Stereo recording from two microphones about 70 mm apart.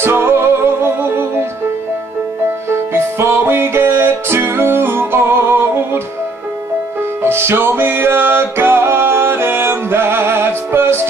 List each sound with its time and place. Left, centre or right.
0.0 s music: right
2.7 s music: right
7.2 s music: right